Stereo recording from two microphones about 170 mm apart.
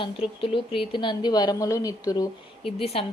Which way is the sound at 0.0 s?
30° left (ahead or behind).